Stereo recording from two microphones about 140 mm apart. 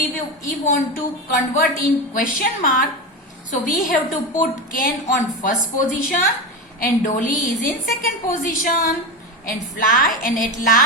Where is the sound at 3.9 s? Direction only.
70° left (ahead or behind).